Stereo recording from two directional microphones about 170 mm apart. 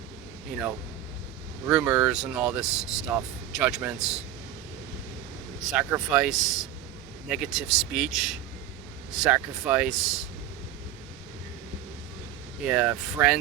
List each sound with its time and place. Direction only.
1.6 s speech: 10° right (ahead or behind)
5.5 s speech: centre (ahead or behind)
12.6 s speech: 5° right (ahead or behind)